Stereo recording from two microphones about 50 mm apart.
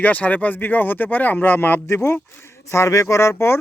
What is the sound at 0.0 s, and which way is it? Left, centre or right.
Speech, left.